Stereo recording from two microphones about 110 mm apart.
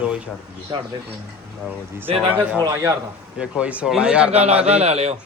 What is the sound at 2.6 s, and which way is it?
Speech, 30° right (ahead or behind).